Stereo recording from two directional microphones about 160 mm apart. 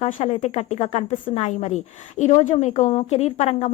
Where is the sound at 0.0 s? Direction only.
40° left (ahead or behind).